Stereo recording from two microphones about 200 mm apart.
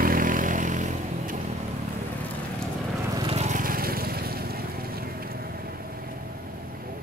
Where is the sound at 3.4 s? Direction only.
40° right (ahead or behind).